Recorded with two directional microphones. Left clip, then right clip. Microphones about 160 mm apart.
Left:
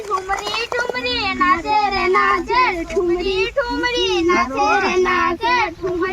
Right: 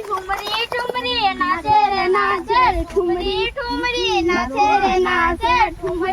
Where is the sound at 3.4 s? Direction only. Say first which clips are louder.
Left 2 dB; 40° right (ahead or behind).